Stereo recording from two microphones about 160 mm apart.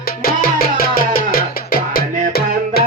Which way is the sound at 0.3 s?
70° left (ahead or behind).